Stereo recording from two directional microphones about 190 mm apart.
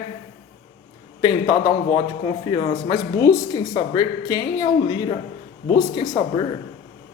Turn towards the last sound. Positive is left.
turn(degrees=20)  # may be behind; listen again after turning